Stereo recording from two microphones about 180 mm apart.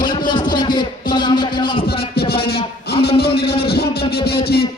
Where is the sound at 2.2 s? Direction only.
60° left (ahead or behind).